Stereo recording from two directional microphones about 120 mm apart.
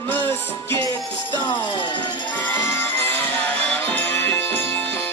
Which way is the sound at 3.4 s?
10° left (ahead or behind).